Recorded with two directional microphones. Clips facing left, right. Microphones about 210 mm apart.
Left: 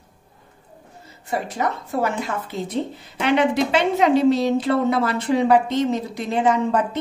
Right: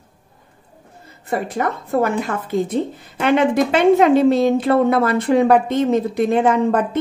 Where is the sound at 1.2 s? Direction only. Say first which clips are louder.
Right 3 dB; 55° right (ahead or behind).